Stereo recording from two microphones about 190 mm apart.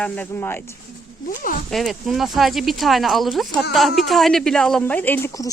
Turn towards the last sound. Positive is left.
turn(degrees=10)  # may be behind; listen again after turning